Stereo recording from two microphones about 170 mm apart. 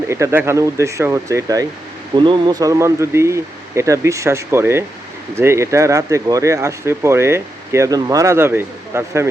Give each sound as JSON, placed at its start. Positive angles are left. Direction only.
{"t": 0.1, "sound": "speech", "side_deg": -15}